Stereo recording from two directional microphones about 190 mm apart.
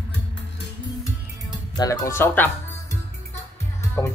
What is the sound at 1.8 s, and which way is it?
Speech, 20° left (ahead or behind).